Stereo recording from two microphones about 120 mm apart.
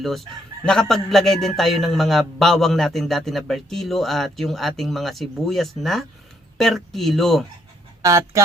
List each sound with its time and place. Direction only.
0.0 s speech: centre (ahead or behind)
8.0 s speech: 25° right (ahead or behind)